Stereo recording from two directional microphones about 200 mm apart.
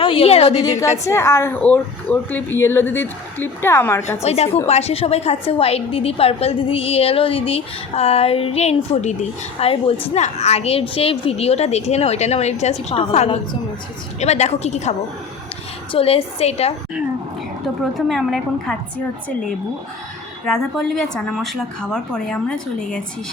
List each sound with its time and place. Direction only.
0.0 s a woman's voice: 25° left (ahead or behind)
0.6 s speech: 15° left (ahead or behind)
4.2 s a woman's voice: 30° left (ahead or behind)
17.9 s a woman's voice: centre (ahead or behind)
20.4 s a woman's voice: 5° left (ahead or behind)